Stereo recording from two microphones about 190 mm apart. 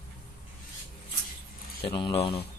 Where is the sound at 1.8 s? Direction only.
25° left (ahead or behind).